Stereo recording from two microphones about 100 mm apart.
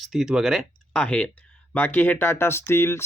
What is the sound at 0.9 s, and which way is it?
Speech, 10° left (ahead or behind).